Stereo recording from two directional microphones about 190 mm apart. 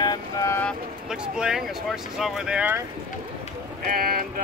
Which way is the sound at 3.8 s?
50° right (ahead or behind).